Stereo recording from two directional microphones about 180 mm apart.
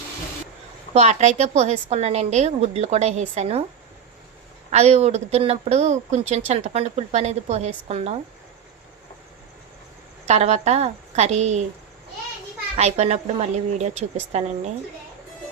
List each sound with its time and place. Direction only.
0.9 s speech: 40° right (ahead or behind)
4.7 s speech: 35° right (ahead or behind)
10.2 s speech: 35° right (ahead or behind)
12.7 s speech: 40° right (ahead or behind)